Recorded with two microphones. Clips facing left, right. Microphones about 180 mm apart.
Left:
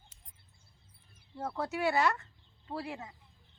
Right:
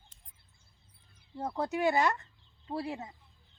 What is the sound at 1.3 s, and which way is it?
Speech, 15° right (ahead or behind).